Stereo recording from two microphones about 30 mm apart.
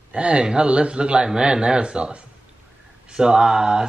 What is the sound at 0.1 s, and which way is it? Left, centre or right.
Speech, right.